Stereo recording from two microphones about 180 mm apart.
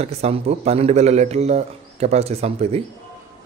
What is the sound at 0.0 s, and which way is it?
A man's voice, 35° right (ahead or behind).